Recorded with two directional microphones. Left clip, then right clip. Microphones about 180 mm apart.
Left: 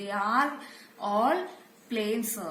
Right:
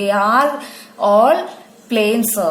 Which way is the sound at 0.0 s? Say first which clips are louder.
Right 13 dB; 45° right (ahead or behind).